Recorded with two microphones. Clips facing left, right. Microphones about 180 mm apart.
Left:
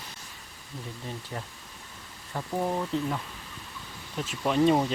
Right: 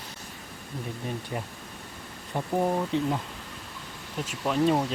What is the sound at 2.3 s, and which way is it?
Speech, 15° right (ahead or behind).